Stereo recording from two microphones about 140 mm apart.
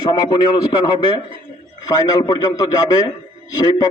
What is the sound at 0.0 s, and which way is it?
A man's voice, 30° left (ahead or behind).